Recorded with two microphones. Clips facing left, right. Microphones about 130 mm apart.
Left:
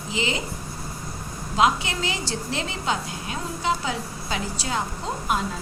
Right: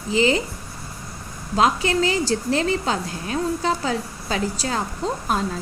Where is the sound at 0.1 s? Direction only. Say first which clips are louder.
Right 9 dB; 40° right (ahead or behind).